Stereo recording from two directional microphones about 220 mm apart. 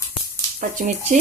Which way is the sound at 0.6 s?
35° right (ahead or behind).